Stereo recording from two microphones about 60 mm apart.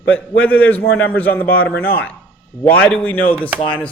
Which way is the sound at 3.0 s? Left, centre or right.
Left.